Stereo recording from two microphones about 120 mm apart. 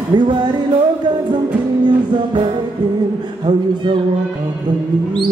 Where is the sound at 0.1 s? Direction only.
40° right (ahead or behind).